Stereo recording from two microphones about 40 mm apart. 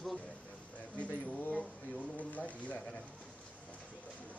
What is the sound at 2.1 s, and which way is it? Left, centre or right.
Speech, left.